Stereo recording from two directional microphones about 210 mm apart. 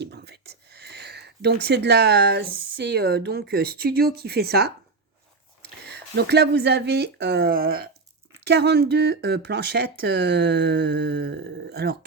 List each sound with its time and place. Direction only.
0.0 s speech: 50° right (ahead or behind)
5.8 s speech: 50° right (ahead or behind)